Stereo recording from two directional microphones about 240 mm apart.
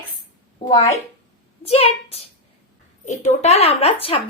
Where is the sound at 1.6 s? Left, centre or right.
Left.